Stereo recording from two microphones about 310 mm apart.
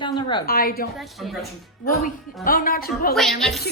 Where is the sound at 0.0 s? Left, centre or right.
Centre.